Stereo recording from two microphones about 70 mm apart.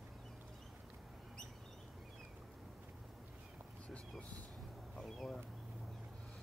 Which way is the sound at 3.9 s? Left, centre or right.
Centre.